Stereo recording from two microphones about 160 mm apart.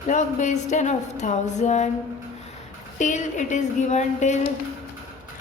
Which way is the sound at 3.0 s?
50° left (ahead or behind).